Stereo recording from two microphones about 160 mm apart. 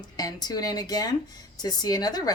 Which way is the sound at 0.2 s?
25° left (ahead or behind).